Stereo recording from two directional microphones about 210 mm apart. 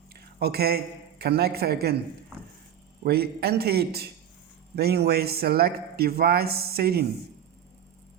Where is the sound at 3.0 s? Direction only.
50° right (ahead or behind).